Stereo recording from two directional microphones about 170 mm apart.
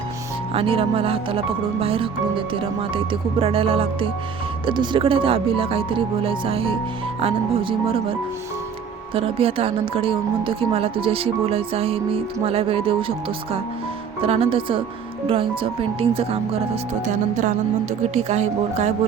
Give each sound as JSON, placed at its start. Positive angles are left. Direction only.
{"t": 0.5, "sound": "speech", "side_deg": -35}
{"t": 9.1, "sound": "speech", "side_deg": -35}
{"t": 17.1, "sound": "music", "side_deg": -50}
{"t": 18.1, "sound": "speech", "side_deg": -40}